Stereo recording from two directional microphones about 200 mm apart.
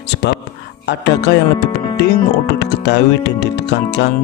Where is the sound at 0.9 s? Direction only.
55° left (ahead or behind).